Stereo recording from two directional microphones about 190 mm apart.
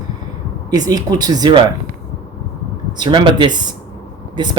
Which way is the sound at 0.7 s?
20° right (ahead or behind).